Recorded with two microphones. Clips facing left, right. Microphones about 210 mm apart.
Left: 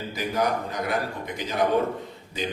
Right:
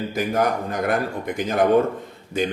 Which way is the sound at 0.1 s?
50° right (ahead or behind).